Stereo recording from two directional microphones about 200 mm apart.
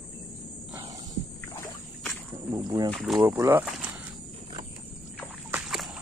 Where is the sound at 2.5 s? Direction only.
20° right (ahead or behind).